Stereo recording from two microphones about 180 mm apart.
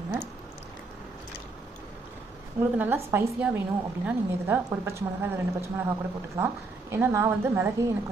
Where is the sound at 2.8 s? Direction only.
15° right (ahead or behind).